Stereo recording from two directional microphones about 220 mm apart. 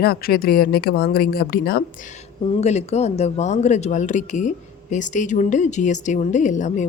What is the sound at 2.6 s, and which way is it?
A woman's voice, 30° left (ahead or behind).